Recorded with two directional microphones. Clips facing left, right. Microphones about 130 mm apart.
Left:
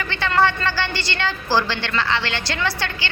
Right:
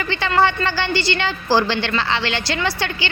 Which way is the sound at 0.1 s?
15° right (ahead or behind).